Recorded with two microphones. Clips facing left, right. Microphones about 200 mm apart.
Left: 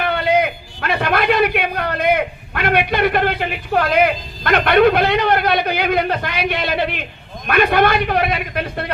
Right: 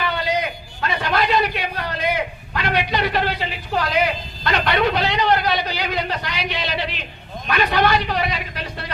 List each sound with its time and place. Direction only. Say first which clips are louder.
0.0 s a man's voice: left 6 dB; 55° left (ahead or behind)